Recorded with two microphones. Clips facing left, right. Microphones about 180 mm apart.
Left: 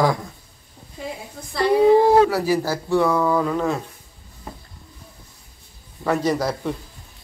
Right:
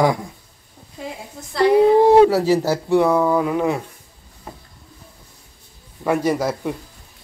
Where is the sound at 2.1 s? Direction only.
25° right (ahead or behind).